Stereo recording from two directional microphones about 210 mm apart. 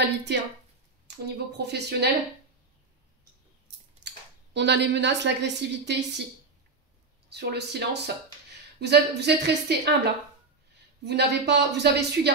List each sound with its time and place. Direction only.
0.0 s a woman's voice: 55° right (ahead or behind)
4.0 s a sound: 55° right (ahead or behind)
4.6 s a woman's voice: 55° right (ahead or behind)
7.3 s a woman's voice: 50° right (ahead or behind)
11.1 s a woman's voice: 55° right (ahead or behind)